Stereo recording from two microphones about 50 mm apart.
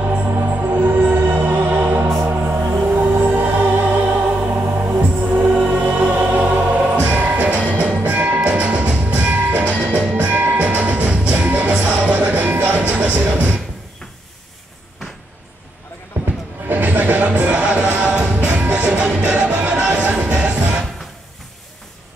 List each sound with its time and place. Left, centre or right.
0.5 s music: right
4.6 s music: right
5.2 s music: right
11.4 s music: right
16.1 s basketball bounce: right
16.6 s music: right